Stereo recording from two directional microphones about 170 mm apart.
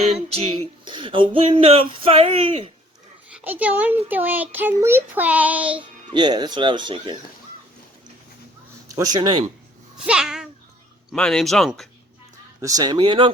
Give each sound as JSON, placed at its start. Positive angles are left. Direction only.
{"t": 0.0, "sound": "music", "side_deg": -40}
{"t": 3.3, "sound": "a child's voice", "side_deg": -10}
{"t": 6.1, "sound": "speech", "side_deg": -25}
{"t": 9.0, "sound": "speech", "side_deg": -25}
{"t": 10.1, "sound": "a child's voice", "side_deg": -5}
{"t": 12.6, "sound": "speech", "side_deg": -20}